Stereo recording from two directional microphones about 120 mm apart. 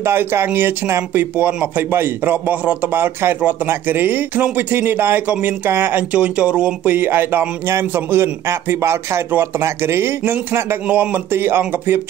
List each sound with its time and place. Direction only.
0.0 s speech: 20° right (ahead or behind)